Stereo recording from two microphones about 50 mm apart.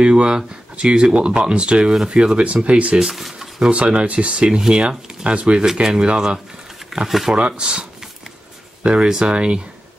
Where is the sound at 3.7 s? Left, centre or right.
Right; by 7.3 s centre.